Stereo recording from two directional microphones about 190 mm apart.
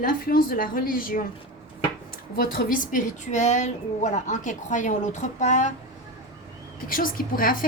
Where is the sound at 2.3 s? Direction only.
50° left (ahead or behind).